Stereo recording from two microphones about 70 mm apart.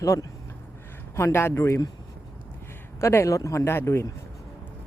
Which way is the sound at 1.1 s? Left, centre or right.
Left.